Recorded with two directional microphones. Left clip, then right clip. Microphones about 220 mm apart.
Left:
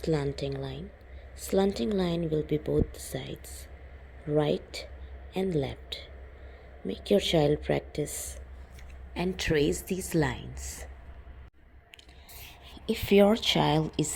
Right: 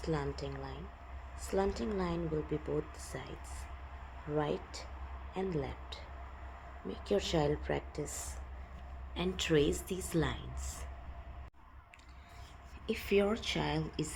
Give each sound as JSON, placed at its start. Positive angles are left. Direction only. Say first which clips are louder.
{"t": 0.0, "sound": "speech", "louder": "left 8 dB", "side_deg": 30}
{"t": 12.8, "sound": "a woman's voice", "louder": "left 9 dB", "side_deg": 30}